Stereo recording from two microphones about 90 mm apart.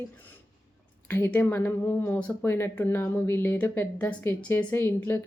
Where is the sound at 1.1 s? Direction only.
25° left (ahead or behind).